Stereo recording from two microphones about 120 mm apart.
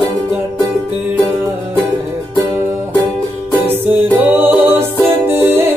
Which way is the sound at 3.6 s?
15° right (ahead or behind).